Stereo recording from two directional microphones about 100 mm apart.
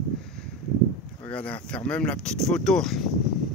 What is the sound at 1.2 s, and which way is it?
Speech, 15° left (ahead or behind).